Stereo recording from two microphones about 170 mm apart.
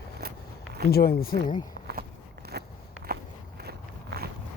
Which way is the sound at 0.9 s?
65° left (ahead or behind).